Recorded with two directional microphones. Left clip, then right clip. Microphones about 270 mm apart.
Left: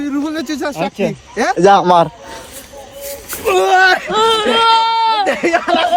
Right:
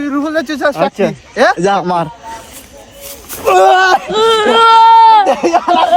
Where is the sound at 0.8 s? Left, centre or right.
Centre.